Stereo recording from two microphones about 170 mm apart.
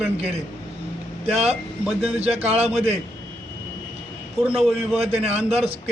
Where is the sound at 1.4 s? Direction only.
5° right (ahead or behind).